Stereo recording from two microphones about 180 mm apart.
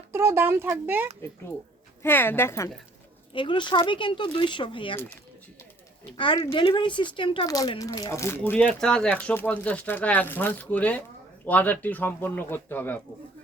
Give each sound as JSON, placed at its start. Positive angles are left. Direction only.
{"t": 0.1, "sound": "speech", "side_deg": -15}
{"t": 2.0, "sound": "speech", "side_deg": 10}
{"t": 3.3, "sound": "speech", "side_deg": 25}
{"t": 6.1, "sound": "speech", "side_deg": 25}